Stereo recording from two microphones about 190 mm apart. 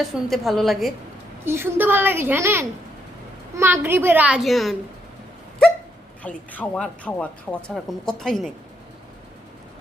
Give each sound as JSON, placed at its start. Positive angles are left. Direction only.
{"t": 0.0, "sound": "a woman's voice", "side_deg": 0}
{"t": 1.5, "sound": "a woman's voice", "side_deg": -10}
{"t": 6.2, "sound": "a woman's voice", "side_deg": 5}